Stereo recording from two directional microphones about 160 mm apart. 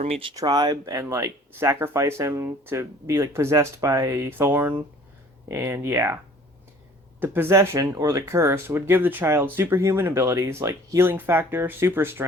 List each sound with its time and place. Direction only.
0.0 s speech: 35° right (ahead or behind)
0.3 s speech: 25° right (ahead or behind)
7.2 s speech: 15° right (ahead or behind)